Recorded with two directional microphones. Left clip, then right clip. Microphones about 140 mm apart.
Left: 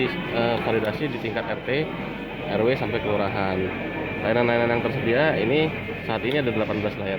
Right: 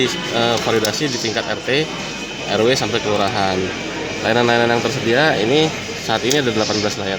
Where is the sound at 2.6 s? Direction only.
90° right.